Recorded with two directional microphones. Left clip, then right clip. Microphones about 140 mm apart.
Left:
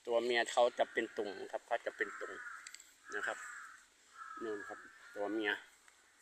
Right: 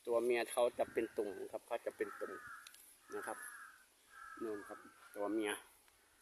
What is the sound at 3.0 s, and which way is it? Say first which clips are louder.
Speech: left 5 dB; 15° right (ahead or behind).